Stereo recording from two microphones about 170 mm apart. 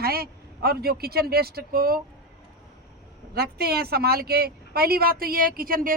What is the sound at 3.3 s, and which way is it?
Speech, 65° right (ahead or behind).